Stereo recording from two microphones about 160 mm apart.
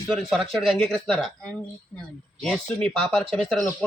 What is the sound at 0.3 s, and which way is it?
Speech, centre (ahead or behind).